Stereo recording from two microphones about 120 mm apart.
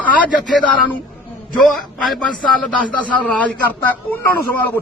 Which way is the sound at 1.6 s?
Centre (ahead or behind).